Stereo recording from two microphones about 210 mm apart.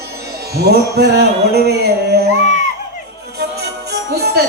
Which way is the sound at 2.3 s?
35° left (ahead or behind).